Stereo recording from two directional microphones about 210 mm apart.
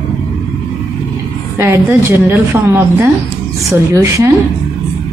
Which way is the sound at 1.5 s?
10° right (ahead or behind).